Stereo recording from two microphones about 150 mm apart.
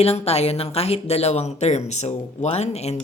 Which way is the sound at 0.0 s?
45° left (ahead or behind).